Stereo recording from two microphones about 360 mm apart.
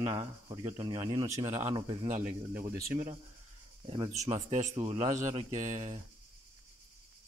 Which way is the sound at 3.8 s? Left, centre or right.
Centre.